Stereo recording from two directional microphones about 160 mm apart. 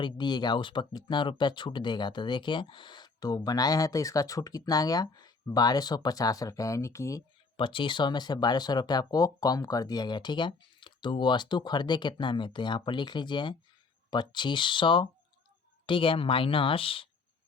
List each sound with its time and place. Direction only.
0.0 s speech: 30° left (ahead or behind)
7.5 s speech: 30° left (ahead or behind)